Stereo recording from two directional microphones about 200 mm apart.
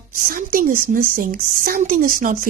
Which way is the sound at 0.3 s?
45° right (ahead or behind).